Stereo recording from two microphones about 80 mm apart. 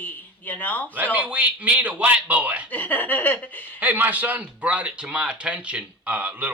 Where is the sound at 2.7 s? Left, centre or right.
Left.